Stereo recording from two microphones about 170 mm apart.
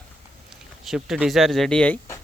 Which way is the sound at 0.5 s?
5° right (ahead or behind).